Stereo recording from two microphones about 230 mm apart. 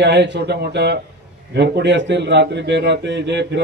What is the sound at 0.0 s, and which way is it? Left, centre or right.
A man's voice, right.